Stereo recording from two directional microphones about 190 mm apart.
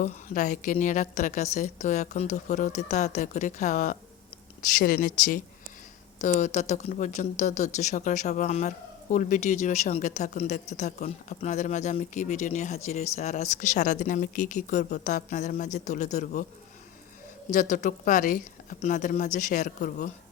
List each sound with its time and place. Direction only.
0.0 s speech: 40° left (ahead or behind)
17.5 s speech: 40° left (ahead or behind)